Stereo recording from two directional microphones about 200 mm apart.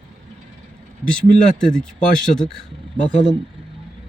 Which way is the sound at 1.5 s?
5° left (ahead or behind).